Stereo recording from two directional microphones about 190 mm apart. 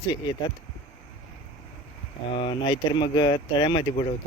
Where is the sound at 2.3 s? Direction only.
25° left (ahead or behind).